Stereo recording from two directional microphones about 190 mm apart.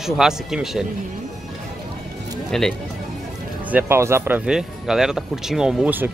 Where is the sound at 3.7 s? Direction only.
10° right (ahead or behind).